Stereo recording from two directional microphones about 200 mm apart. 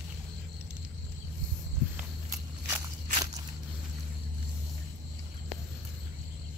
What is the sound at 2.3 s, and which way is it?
Walk, 15° right (ahead or behind).